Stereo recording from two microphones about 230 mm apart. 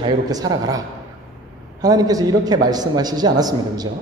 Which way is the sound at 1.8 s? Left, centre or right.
Centre.